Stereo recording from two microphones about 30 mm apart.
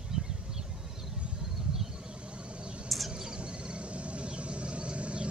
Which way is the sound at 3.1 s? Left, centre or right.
Right.